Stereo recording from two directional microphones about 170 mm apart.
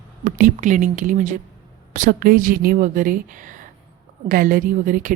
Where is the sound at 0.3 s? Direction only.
50° right (ahead or behind).